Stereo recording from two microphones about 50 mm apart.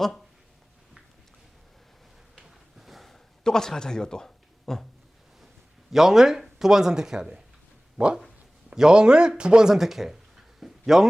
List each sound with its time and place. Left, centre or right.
2.4 s a sound: centre
5.9 s speech: centre
10.6 s dog: centre